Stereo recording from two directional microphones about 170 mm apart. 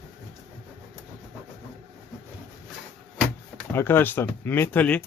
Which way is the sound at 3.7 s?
10° left (ahead or behind).